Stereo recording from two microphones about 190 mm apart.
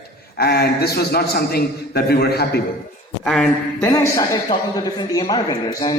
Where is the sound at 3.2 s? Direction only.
Centre (ahead or behind).